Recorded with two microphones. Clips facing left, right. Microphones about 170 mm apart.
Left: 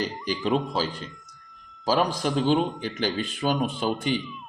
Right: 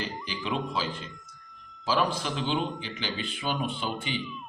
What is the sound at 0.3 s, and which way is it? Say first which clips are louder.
A man's voice: left 8 dB; 40° left (ahead or behind).